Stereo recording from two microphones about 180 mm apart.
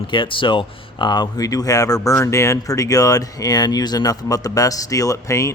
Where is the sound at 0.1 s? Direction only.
25° left (ahead or behind).